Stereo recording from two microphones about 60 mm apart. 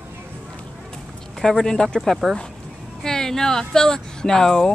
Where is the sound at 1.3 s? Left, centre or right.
Centre.